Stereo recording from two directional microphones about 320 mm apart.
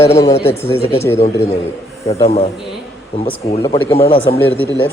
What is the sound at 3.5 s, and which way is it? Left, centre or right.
Speech, centre.